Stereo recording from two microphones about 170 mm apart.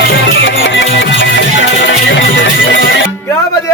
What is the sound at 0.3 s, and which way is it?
Music, 90° left.